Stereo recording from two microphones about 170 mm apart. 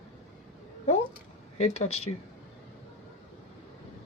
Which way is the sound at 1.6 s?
40° left (ahead or behind).